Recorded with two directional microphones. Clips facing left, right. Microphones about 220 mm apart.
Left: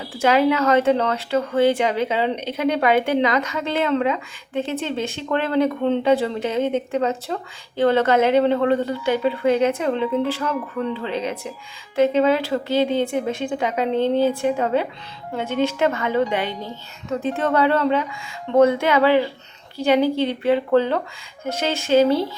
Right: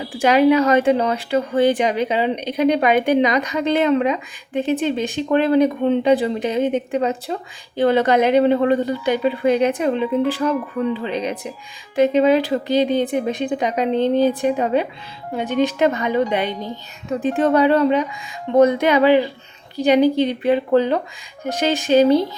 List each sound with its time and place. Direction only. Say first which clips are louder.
0.1 s speech: right 3 dB; 15° right (ahead or behind)